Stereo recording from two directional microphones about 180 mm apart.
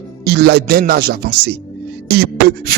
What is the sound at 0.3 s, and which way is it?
Speech, 65° right (ahead or behind).